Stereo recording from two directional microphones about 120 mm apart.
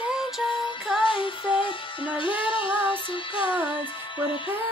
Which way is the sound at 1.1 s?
45° left (ahead or behind).